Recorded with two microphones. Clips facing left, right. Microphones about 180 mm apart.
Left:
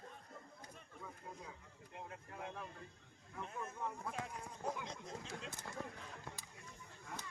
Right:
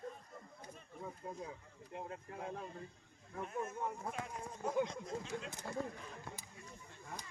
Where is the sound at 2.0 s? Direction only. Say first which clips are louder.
Right 4 dB; 25° right (ahead or behind).